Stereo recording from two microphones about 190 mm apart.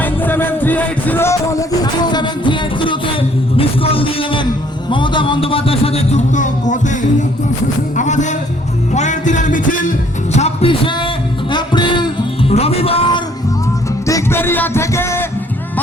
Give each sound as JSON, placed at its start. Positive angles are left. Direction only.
{"t": 0.0, "sound": "music", "side_deg": 10}
{"t": 4.9, "sound": "a sound", "side_deg": 25}
{"t": 7.9, "sound": "music", "side_deg": 40}
{"t": 10.3, "sound": "a sound", "side_deg": 30}
{"t": 11.5, "sound": "music", "side_deg": 25}
{"t": 14.1, "sound": "music", "side_deg": 15}